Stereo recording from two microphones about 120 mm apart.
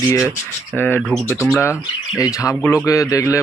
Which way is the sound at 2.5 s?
10° left (ahead or behind).